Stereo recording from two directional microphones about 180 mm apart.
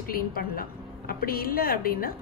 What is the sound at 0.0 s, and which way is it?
A woman's voice, 55° left (ahead or behind).